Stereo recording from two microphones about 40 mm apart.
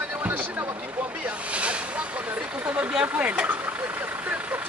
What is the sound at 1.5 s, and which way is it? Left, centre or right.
Boat, right.